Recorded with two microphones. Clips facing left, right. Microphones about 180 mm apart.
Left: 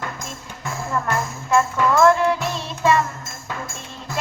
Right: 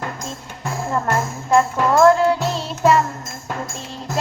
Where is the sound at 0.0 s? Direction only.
35° right (ahead or behind).